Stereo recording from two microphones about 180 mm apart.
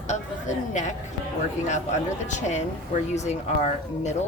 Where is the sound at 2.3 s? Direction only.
40° left (ahead or behind).